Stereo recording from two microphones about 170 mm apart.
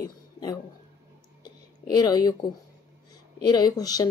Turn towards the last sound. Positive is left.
turn(degrees=20)  # may be behind; listen again after turning